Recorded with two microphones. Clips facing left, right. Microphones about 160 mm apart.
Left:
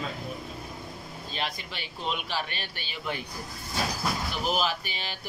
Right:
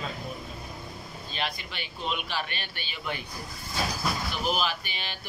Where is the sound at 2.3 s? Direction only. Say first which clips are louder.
Left 1 dB; 35° left (ahead or behind).